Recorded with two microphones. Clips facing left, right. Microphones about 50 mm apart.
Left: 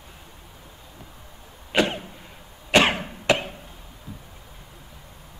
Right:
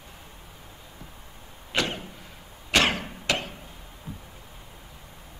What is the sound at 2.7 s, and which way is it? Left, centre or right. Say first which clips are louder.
Cough: left 4 dB; centre.